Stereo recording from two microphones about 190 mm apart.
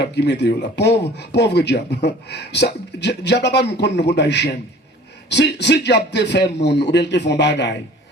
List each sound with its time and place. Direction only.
0.0 s speech: 65° left (ahead or behind)